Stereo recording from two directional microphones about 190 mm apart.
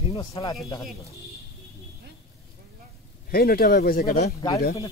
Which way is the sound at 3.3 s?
50° left (ahead or behind).